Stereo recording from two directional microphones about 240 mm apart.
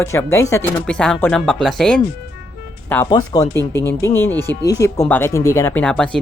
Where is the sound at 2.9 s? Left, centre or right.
Centre.